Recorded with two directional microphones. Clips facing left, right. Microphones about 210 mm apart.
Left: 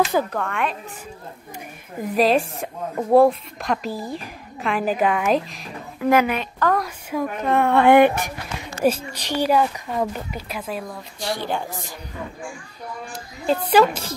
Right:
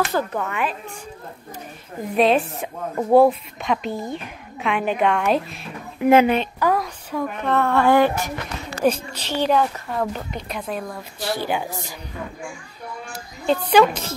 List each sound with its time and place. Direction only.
0.3 s speech: 5° right (ahead or behind)
2.1 s speech: centre (ahead or behind)
5.9 s speech: 25° right (ahead or behind)
6.6 s a sound: 5° right (ahead or behind)
7.1 s speech: 10° left (ahead or behind)
13.1 s speech: 5° left (ahead or behind)